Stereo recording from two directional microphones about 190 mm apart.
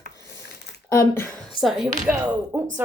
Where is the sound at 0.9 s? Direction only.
15° left (ahead or behind).